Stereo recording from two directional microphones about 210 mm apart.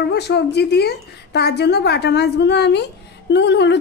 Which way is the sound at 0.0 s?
50° left (ahead or behind).